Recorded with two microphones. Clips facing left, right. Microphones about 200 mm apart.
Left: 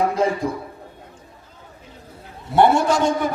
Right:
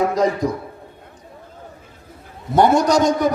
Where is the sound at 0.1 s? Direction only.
40° right (ahead or behind).